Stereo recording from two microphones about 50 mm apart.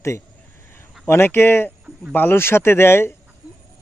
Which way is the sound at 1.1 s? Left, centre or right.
Left.